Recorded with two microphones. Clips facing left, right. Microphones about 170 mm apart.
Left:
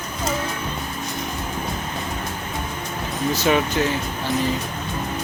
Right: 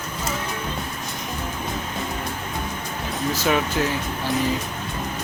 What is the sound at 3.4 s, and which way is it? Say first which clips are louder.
Speech: left 2 dB; centre (ahead or behind).